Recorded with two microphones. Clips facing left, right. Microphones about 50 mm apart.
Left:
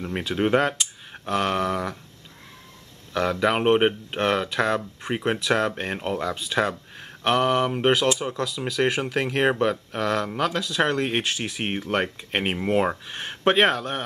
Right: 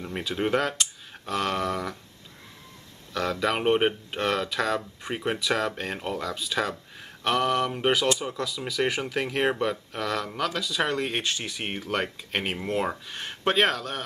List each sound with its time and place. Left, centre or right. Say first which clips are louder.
0.2 s speech: left 4 dB; centre
3.1 s speech: left 4 dB; centre
9.5 s speech: left 4 dB; centre
11.1 s speech: left 3 dB; centre